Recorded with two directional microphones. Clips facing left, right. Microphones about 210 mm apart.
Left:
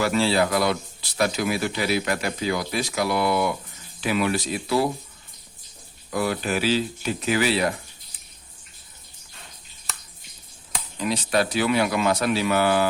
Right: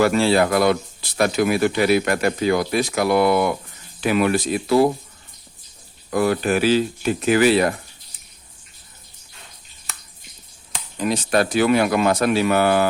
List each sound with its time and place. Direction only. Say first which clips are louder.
0.0 s speech: right 5 dB; 55° right (ahead or behind)
6.1 s speech: right 6 dB; 50° right (ahead or behind)
11.0 s speech: right 4 dB; 50° right (ahead or behind)